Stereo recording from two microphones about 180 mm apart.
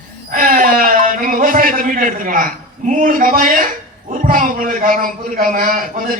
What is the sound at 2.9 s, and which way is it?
A man's voice, 50° right (ahead or behind).